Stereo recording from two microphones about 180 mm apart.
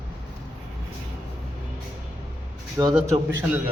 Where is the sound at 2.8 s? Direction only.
20° right (ahead or behind).